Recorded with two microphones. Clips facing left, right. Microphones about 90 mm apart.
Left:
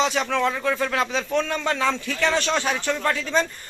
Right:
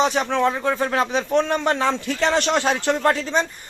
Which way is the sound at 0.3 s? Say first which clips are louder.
Right 2 dB; 25° right (ahead or behind).